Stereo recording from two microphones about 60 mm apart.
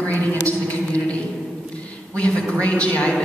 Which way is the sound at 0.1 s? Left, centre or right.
Left.